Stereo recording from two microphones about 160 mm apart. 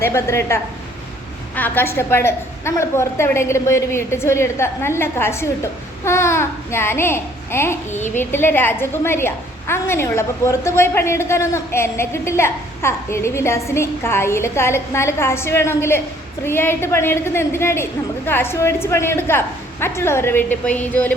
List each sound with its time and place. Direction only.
0.0 s a woman's voice: 15° left (ahead or behind)